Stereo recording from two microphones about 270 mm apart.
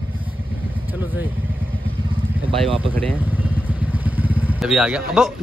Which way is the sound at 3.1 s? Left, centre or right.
Centre.